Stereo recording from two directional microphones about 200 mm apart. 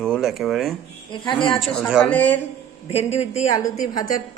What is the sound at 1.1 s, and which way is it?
Speech, 25° left (ahead or behind).